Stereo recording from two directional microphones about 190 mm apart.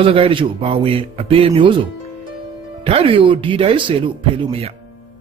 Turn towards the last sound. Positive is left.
turn(degrees=-30)  # may be behind; listen again after turning